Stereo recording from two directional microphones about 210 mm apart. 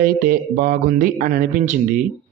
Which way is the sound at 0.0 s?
45° right (ahead or behind).